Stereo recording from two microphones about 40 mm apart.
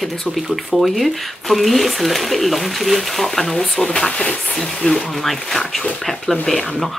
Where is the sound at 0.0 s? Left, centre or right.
Centre.